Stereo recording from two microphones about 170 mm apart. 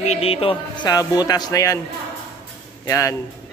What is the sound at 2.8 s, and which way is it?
Speech, 20° left (ahead or behind).